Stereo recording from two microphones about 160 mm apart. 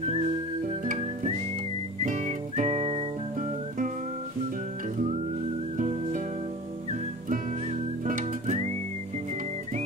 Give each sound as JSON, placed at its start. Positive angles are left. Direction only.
{"t": 0.7, "sound": "music", "side_deg": -45}
{"t": 5.8, "sound": "music", "side_deg": -50}
{"t": 8.0, "sound": "music", "side_deg": -50}